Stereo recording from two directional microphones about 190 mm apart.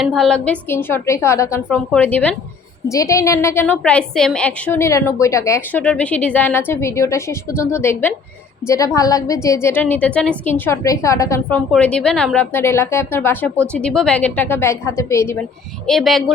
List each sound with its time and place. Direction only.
0.0 s a woman's voice: centre (ahead or behind)
15.9 s speech: centre (ahead or behind)